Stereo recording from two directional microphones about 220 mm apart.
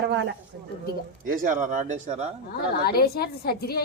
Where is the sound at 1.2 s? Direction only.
40° right (ahead or behind).